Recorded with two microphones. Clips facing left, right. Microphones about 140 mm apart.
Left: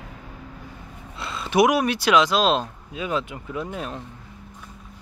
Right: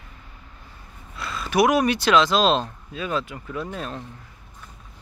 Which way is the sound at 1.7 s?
5° left (ahead or behind).